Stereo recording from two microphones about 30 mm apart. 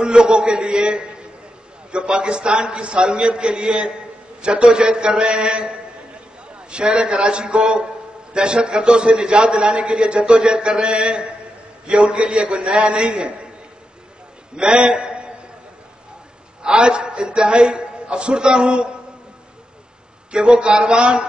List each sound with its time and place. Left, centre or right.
0.0 s a man's voice: right
14.5 s a man's voice: right
16.6 s a man's voice: right
20.2 s a man's voice: right